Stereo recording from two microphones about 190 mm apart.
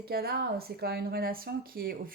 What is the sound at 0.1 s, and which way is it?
Speech, 55° right (ahead or behind).